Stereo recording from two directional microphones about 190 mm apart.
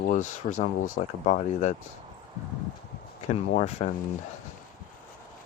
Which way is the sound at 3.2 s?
35° left (ahead or behind).